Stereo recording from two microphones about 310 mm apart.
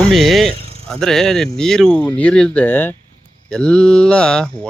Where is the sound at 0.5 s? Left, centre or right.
Centre.